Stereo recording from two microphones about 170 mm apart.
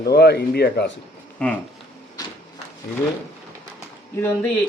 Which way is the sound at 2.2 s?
20° left (ahead or behind).